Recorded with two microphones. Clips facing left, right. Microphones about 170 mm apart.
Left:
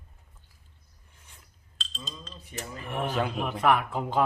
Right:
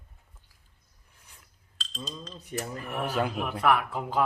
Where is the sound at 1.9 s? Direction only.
40° right (ahead or behind).